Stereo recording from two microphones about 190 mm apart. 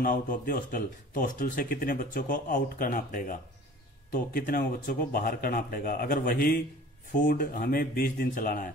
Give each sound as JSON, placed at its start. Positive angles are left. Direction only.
{"t": 0.0, "sound": "speech", "side_deg": 45}